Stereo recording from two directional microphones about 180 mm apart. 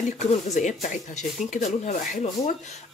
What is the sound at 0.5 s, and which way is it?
Speech, 40° left (ahead or behind).